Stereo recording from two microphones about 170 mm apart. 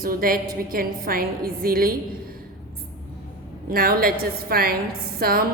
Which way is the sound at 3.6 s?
60° right (ahead or behind).